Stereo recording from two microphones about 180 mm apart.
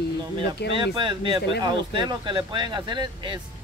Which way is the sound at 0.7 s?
25° right (ahead or behind).